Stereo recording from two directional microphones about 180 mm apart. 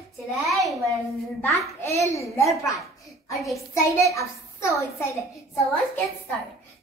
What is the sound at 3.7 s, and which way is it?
A child's voice, 15° left (ahead or behind).